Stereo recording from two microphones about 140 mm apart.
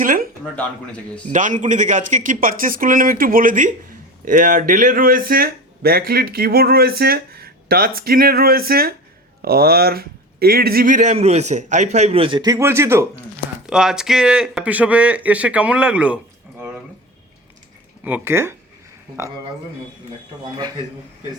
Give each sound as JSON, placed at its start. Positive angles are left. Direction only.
{"t": 0.0, "sound": "speech", "side_deg": -75}
{"t": 1.3, "sound": "speech", "side_deg": -65}
{"t": 12.5, "sound": "speech", "side_deg": -20}
{"t": 13.7, "sound": "speech", "side_deg": -5}
{"t": 18.0, "sound": "speech", "side_deg": -15}
{"t": 20.4, "sound": "a man's voice", "side_deg": -30}